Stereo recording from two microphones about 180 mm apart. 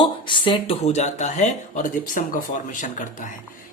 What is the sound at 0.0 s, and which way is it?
Speech, 30° left (ahead or behind).